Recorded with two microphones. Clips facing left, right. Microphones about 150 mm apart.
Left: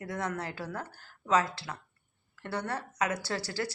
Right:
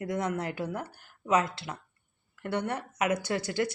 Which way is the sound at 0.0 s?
20° right (ahead or behind).